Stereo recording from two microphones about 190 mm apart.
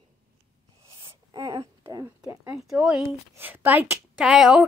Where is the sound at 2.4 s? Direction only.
Centre (ahead or behind).